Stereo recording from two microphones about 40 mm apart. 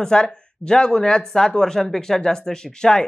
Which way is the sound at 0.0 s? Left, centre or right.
Left.